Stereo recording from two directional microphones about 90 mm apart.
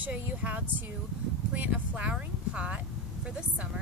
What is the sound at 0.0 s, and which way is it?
A woman's voice, 15° right (ahead or behind).